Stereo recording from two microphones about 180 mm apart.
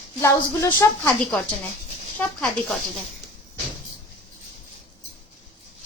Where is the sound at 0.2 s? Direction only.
15° left (ahead or behind).